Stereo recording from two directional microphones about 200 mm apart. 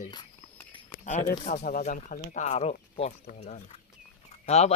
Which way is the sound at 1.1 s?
40° left (ahead or behind).